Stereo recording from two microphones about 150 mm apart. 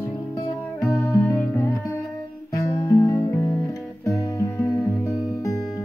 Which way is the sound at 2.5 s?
20° left (ahead or behind).